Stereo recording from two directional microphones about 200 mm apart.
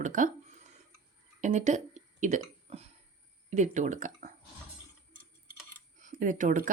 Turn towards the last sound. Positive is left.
turn(degrees=-40)  # may be behind; listen again after turning